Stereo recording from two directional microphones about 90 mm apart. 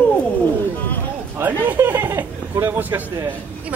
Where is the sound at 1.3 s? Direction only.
20° right (ahead or behind).